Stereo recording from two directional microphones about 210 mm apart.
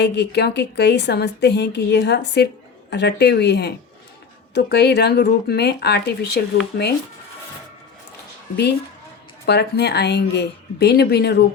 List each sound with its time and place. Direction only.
0.0 s a woman's voice: 55° left (ahead or behind)
9.5 s a woman's voice: 50° left (ahead or behind)